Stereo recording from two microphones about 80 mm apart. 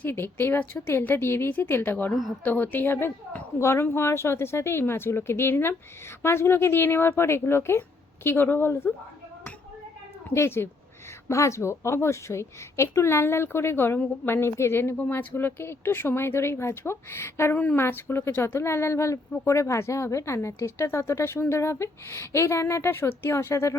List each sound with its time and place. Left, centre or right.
0.0 s a woman's voice: left
10.3 s a woman's voice: left